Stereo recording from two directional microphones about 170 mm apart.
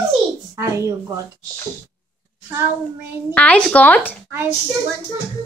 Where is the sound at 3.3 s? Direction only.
10° left (ahead or behind).